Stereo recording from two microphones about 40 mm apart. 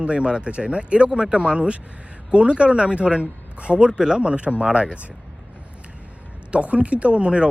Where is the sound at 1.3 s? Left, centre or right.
Right.